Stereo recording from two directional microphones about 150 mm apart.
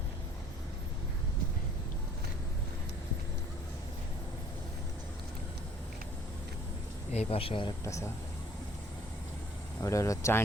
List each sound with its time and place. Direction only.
7.1 s speech: 40° left (ahead or behind)
7.9 s speech: 20° left (ahead or behind)
9.8 s speech: 20° left (ahead or behind)